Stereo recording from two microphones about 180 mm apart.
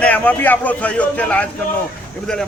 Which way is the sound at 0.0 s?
10° left (ahead or behind).